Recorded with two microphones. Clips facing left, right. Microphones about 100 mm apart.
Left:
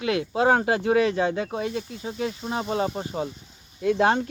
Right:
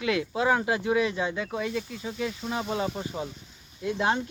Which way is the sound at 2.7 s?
45° left (ahead or behind).